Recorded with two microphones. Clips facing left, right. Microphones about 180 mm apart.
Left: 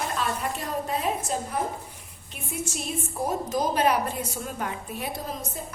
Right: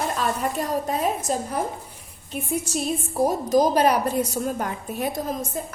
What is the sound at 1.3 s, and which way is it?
Speech, 40° right (ahead or behind).